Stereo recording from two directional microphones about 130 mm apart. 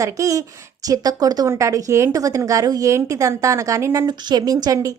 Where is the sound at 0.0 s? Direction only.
25° right (ahead or behind).